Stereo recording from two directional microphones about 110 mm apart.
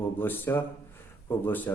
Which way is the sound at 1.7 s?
20° left (ahead or behind).